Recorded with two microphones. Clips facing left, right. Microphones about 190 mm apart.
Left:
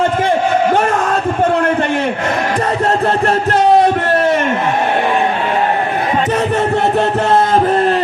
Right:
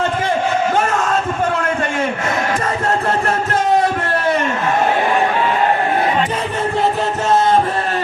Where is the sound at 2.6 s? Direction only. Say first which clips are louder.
Left 4 dB; 35° left (ahead or behind).